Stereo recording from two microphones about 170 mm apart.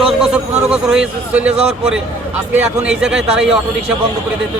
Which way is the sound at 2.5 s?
5° right (ahead or behind).